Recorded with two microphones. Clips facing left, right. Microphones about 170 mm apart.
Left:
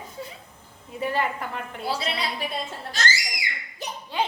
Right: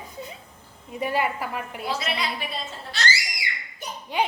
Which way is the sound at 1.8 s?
35° left (ahead or behind).